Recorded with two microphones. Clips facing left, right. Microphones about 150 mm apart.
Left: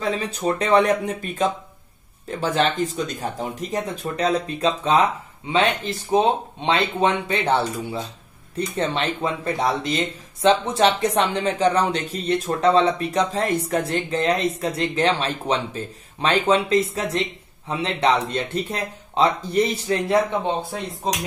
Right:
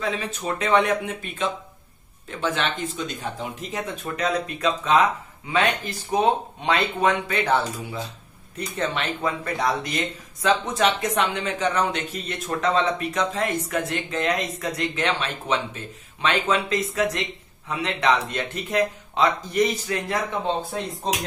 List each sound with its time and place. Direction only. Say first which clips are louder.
0.0 s speech: left 4 dB; 35° left (ahead or behind)